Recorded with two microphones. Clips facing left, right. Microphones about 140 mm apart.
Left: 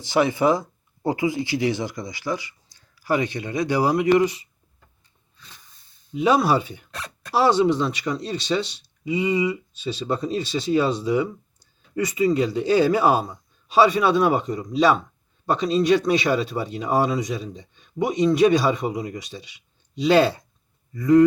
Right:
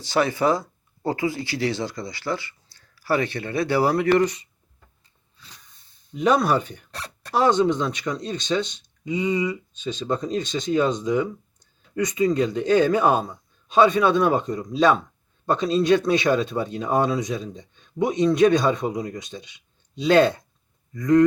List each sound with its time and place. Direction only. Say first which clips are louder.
0.0 s speech: left 2 dB; 20° left (ahead or behind)
6.1 s speech: left 1 dB; 10° left (ahead or behind)